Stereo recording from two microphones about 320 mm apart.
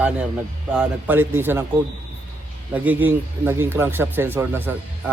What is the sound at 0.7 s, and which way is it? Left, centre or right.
Speech, centre.